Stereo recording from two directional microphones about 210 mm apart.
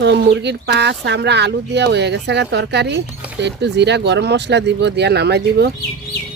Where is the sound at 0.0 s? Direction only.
55° right (ahead or behind).